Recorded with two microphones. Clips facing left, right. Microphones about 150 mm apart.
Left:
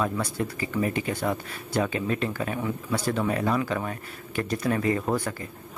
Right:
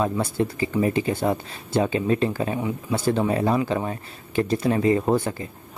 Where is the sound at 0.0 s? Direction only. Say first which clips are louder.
Right 4 dB; 25° right (ahead or behind).